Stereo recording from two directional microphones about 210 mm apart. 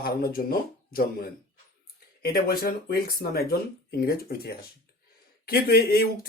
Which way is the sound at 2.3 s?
45° left (ahead or behind).